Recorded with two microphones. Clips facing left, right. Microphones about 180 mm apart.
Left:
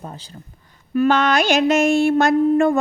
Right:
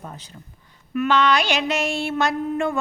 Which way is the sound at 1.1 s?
50° left (ahead or behind).